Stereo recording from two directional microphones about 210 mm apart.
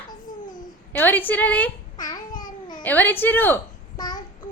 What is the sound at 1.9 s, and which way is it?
Babbling, 20° left (ahead or behind).